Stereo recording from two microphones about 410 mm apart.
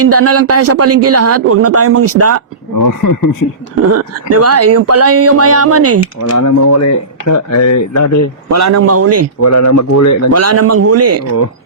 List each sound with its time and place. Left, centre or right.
0.0 s speech: right
2.7 s speech: left
3.8 s speech: right
6.0 s speech: left
8.4 s speech: right
9.4 s speech: left
10.3 s speech: right